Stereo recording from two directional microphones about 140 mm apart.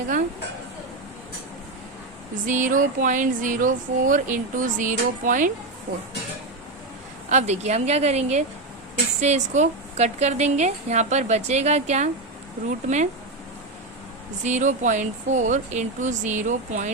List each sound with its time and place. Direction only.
2.5 s speech: 65° right (ahead or behind)
7.3 s a woman's voice: 55° right (ahead or behind)
14.4 s speech: 60° right (ahead or behind)